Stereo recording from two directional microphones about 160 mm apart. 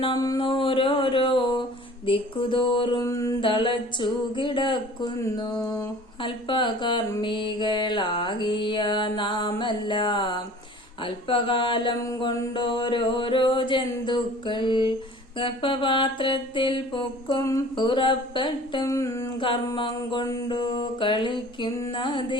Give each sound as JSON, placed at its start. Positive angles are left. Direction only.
{"t": 0.0, "sound": "mantra", "side_deg": 25}
{"t": 0.4, "sound": "a sound", "side_deg": 35}
{"t": 3.0, "sound": "mantra", "side_deg": 20}
{"t": 3.4, "sound": "mantra", "side_deg": 30}
{"t": 11.0, "sound": "a sound", "side_deg": 30}
{"t": 12.0, "sound": "mantra", "side_deg": 20}
{"t": 15.4, "sound": "a sound", "side_deg": 30}
{"t": 17.4, "sound": "mantra", "side_deg": 25}
{"t": 19.4, "sound": "mantra", "side_deg": 30}